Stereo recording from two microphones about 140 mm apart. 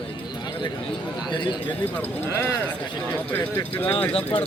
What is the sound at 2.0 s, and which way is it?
Speech, 15° left (ahead or behind).